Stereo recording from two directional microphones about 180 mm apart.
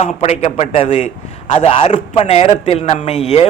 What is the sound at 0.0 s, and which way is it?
A man's voice, 40° left (ahead or behind).